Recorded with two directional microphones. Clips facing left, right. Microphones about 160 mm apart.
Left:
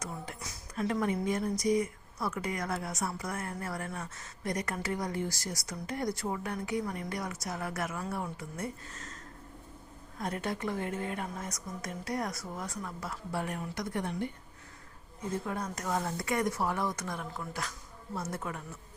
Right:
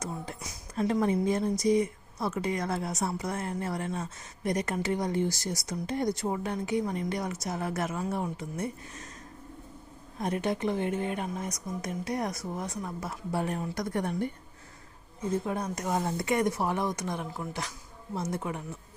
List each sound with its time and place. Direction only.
0.0 s speech: 25° right (ahead or behind)
10.2 s speech: 20° right (ahead or behind)
13.7 s speech: 45° right (ahead or behind)
15.2 s speech: 20° right (ahead or behind)